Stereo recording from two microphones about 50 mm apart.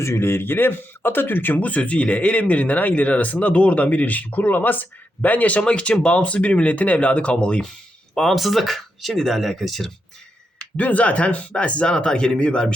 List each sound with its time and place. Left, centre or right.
0.0 s speech: left
8.1 s speech: centre
10.8 s speech: left